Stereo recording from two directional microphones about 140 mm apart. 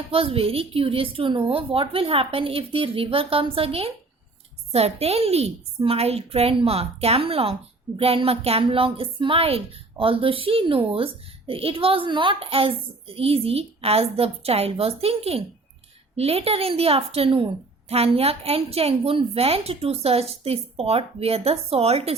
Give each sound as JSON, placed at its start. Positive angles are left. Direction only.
{"t": 0.1, "sound": "a woman's voice", "side_deg": -45}